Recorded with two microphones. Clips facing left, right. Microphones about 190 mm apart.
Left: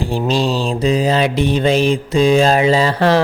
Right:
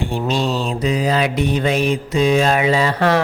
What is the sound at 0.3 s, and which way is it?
Mantra, 30° left (ahead or behind).